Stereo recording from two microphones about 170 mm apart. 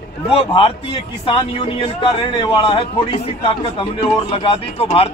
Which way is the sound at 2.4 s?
30° left (ahead or behind).